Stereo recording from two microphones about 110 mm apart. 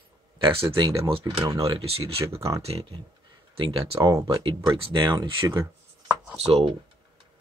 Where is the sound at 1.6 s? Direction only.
60° right (ahead or behind).